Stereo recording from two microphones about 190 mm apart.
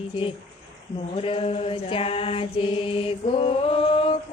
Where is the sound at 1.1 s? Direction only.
30° left (ahead or behind).